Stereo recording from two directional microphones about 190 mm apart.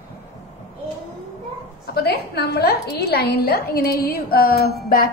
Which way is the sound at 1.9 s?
60° left (ahead or behind).